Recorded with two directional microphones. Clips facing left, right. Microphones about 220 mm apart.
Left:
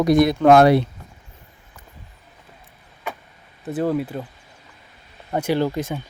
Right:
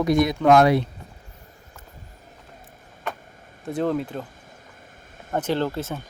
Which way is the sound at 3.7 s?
5° left (ahead or behind).